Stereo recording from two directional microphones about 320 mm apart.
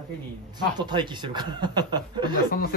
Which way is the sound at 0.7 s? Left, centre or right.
Centre.